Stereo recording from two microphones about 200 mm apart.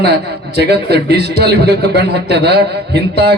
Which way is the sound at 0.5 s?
55° right (ahead or behind).